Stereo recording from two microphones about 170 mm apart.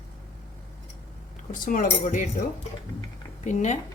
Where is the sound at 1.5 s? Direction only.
50° left (ahead or behind).